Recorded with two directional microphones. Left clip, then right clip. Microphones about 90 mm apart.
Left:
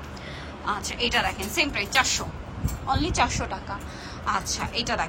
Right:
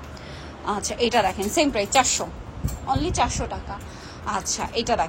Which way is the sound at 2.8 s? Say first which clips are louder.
Right 1 dB; 30° right (ahead or behind).